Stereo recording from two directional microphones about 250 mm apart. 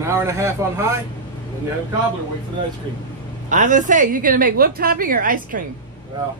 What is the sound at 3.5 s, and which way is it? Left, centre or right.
A woman's voice, right.